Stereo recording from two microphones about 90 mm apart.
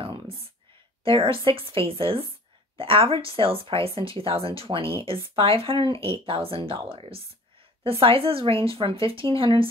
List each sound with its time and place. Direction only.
1.0 s a woman's voice: 70° right (ahead or behind)